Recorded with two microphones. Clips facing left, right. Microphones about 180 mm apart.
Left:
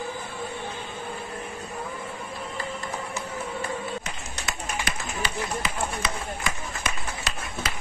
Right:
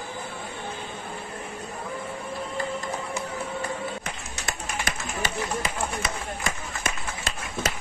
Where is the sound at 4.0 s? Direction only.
50° right (ahead or behind).